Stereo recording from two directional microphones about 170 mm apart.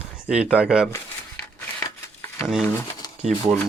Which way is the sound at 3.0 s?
20° left (ahead or behind).